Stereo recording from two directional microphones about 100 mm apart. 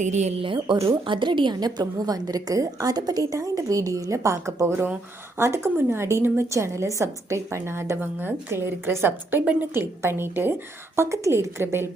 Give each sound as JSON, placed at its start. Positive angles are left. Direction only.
{"t": 0.3, "sound": "a woman's voice", "side_deg": -60}